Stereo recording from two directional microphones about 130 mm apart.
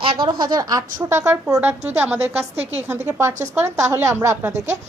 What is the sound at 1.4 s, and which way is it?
Speech, 10° right (ahead or behind).